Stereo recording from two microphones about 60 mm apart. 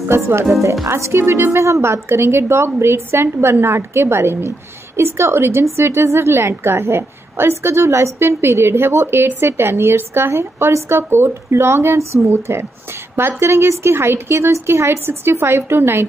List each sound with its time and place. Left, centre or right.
0.1 s a woman's voice: right